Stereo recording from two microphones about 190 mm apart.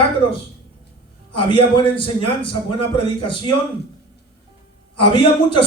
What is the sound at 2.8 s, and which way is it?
Speech, 30° left (ahead or behind).